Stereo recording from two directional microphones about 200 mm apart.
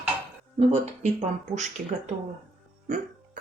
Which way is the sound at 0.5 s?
30° right (ahead or behind).